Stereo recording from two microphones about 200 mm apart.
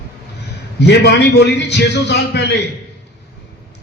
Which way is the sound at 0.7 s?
60° left (ahead or behind).